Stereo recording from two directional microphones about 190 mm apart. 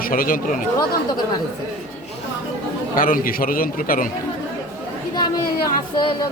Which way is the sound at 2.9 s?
50° left (ahead or behind).